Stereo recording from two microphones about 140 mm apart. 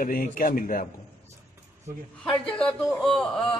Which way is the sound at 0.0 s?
85° left.